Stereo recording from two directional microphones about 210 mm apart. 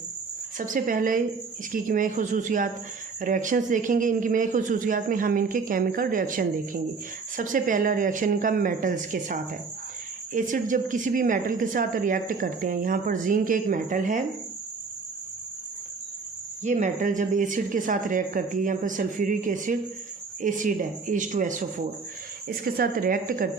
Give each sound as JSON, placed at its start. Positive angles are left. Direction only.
{"t": 0.6, "sound": "a woman's voice", "side_deg": -40}
{"t": 16.6, "sound": "a woman's voice", "side_deg": -35}